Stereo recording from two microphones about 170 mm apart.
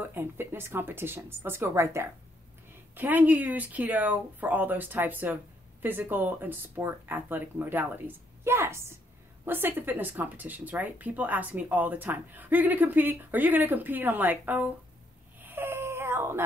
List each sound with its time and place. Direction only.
0.0 s speech: 10° right (ahead or behind)
15.4 s whimper: 10° right (ahead or behind)